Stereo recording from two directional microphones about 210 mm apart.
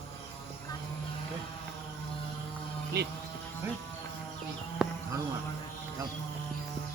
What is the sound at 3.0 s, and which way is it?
Speech, 50° right (ahead or behind).